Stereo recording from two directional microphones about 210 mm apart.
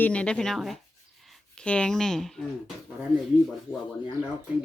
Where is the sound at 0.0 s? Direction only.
5° left (ahead or behind).